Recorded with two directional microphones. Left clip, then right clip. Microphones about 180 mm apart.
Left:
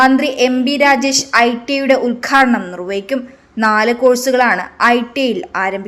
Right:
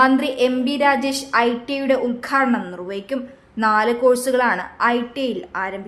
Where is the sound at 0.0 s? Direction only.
15° left (ahead or behind).